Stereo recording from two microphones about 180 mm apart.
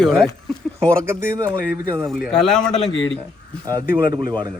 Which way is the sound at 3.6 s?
20° right (ahead or behind).